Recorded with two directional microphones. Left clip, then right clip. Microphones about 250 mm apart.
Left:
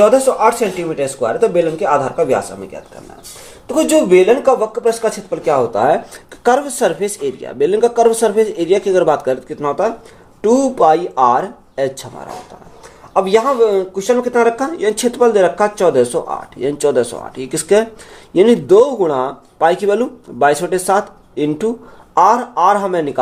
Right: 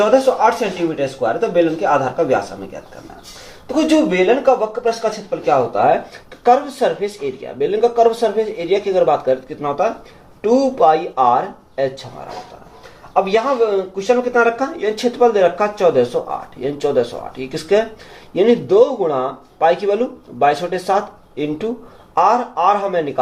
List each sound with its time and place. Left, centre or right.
0.0 s speech: left
3.7 s speech: left
13.1 s speech: left